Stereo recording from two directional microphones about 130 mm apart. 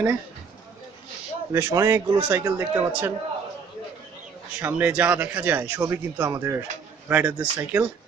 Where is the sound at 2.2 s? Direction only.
15° right (ahead or behind).